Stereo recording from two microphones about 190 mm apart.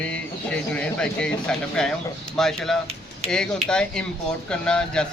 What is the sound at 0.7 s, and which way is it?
Speech, 5° left (ahead or behind).